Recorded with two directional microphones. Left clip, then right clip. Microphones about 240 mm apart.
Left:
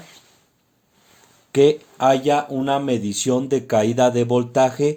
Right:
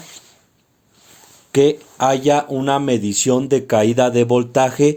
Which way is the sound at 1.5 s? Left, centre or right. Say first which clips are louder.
Right 1 dB; right.